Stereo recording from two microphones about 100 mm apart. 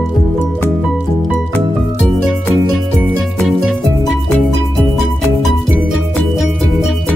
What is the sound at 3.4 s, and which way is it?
Music, centre (ahead or behind).